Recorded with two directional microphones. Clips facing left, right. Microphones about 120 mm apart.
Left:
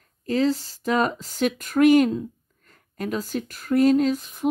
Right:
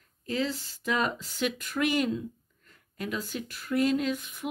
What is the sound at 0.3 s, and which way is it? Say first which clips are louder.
Speech: left 9 dB; 40° left (ahead or behind).